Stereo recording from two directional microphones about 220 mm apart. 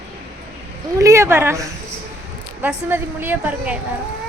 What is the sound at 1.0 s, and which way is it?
A woman's voice, 10° right (ahead or behind).